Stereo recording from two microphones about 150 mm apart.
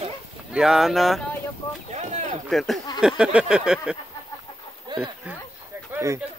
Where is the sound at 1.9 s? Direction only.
50° right (ahead or behind).